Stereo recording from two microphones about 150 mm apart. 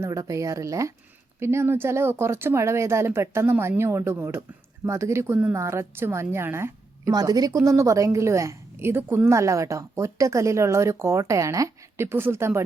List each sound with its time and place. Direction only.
0.0 s a woman's voice: 20° right (ahead or behind)